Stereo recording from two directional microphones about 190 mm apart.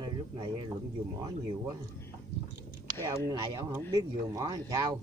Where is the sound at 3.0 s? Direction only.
20° right (ahead or behind).